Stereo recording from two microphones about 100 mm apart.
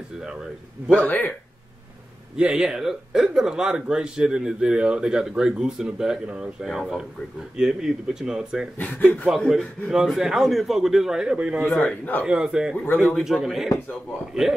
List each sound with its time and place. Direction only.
1.0 s a man's voice: 20° left (ahead or behind)
2.3 s a man's voice: 5° right (ahead or behind)
8.7 s a man's voice: 15° left (ahead or behind)
9.8 s a man's voice: 5° right (ahead or behind)
11.8 s a man's voice: 15° left (ahead or behind)
12.3 s a man's voice: 5° right (ahead or behind)
12.7 s speech: 20° left (ahead or behind)
13.1 s a man's voice: centre (ahead or behind)